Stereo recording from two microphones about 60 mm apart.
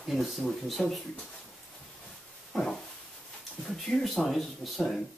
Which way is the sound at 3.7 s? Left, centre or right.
Centre.